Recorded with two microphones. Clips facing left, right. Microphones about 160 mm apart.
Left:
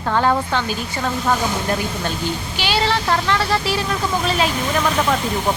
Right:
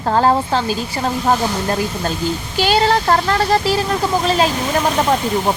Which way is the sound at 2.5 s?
45° right (ahead or behind).